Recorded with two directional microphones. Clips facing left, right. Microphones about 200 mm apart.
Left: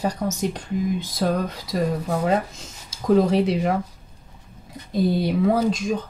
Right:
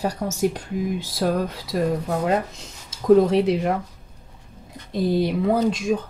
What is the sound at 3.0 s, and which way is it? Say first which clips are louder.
Speech: right 2 dB; centre (ahead or behind).